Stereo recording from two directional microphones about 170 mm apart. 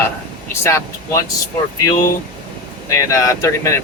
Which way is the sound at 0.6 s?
15° left (ahead or behind).